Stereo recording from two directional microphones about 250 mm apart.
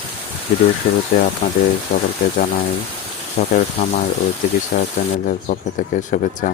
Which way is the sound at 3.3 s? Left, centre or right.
Left.